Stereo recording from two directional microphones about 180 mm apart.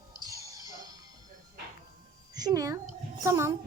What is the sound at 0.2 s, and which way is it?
Music, 20° right (ahead or behind).